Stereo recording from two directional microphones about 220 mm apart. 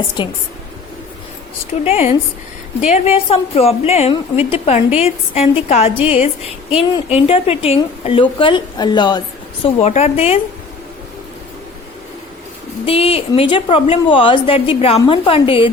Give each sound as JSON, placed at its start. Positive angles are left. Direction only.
{"t": 0.2, "sound": "a woman's voice", "side_deg": 20}
{"t": 1.8, "sound": "a woman's voice", "side_deg": 30}
{"t": 12.8, "sound": "a woman's voice", "side_deg": 25}